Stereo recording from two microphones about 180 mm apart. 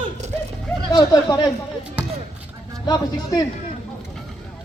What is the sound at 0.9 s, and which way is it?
Speech, 20° left (ahead or behind).